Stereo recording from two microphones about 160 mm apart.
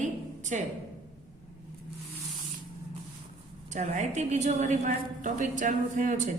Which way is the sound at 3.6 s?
50° right (ahead or behind).